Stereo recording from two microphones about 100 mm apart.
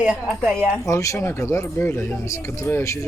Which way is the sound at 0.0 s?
10° right (ahead or behind).